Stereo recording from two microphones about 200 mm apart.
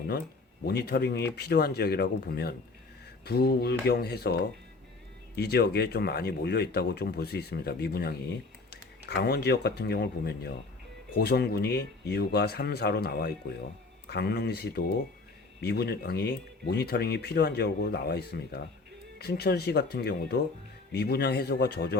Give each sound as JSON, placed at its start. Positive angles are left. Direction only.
{"t": 0.6, "sound": "speech", "side_deg": 55}